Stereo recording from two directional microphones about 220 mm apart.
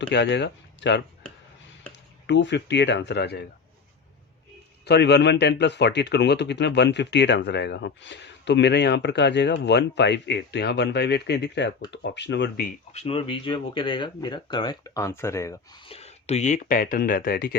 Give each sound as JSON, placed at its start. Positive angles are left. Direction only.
{"t": 0.1, "sound": "a man's voice", "side_deg": 55}
{"t": 2.2, "sound": "a man's voice", "side_deg": 55}
{"t": 4.9, "sound": "a man's voice", "side_deg": 50}
{"t": 12.9, "sound": "speech", "side_deg": 30}
{"t": 15.9, "sound": "speech", "side_deg": 30}